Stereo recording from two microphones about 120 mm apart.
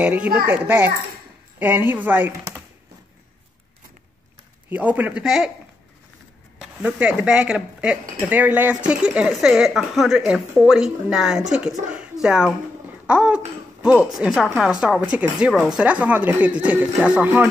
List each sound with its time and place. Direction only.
0.0 s speech: 15° right (ahead or behind)
4.6 s speech: 15° right (ahead or behind)
6.6 s speech: 10° right (ahead or behind)
13.0 s babbling: 10° right (ahead or behind)
14.1 s speech: 5° right (ahead or behind)